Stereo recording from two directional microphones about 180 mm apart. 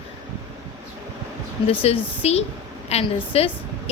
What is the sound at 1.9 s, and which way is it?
A woman's voice, 35° left (ahead or behind).